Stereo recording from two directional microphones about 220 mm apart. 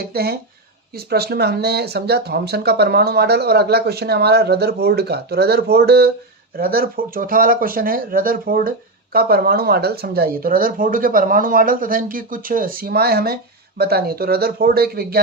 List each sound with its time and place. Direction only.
0.0 s speech: 45° right (ahead or behind)